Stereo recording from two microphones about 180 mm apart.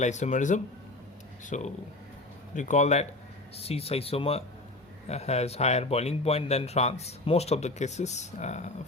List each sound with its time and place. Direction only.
0.0 s speech: 40° left (ahead or behind)